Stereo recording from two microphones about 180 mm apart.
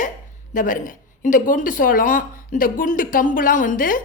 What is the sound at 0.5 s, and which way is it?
Speech, 50° left (ahead or behind).